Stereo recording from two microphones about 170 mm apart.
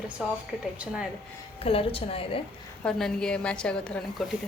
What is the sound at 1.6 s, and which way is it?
Speech, 35° left (ahead or behind).